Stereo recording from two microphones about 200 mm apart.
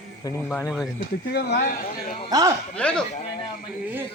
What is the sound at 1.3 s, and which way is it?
Speech, 50° left (ahead or behind).